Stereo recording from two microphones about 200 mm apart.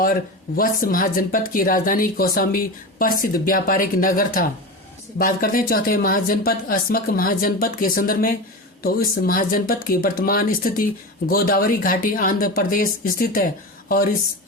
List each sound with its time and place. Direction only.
0.0 s speech: 45° left (ahead or behind)